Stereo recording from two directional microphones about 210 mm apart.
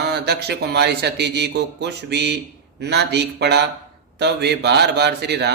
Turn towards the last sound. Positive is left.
turn(degrees=-50)  # may be behind; listen again after turning